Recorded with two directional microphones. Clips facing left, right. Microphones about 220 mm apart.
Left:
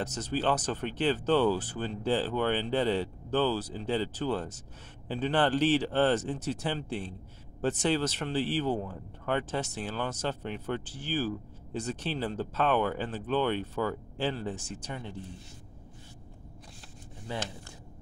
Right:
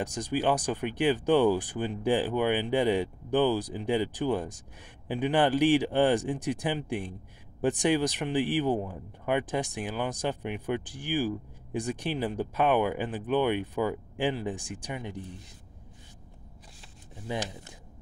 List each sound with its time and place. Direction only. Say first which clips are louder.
0.0 s speech: right 2 dB; 15° right (ahead or behind)
17.3 s speech: right 3 dB; 15° right (ahead or behind)